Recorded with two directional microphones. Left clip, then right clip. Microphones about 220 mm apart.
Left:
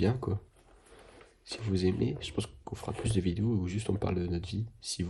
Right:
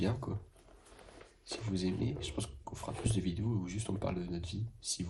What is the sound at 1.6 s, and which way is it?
Speech, 45° left (ahead or behind).